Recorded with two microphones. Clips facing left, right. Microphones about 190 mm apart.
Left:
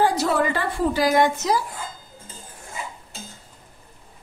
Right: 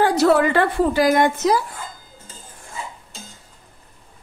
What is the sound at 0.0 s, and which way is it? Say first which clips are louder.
A woman's voice: right 5 dB; 70° right (ahead or behind).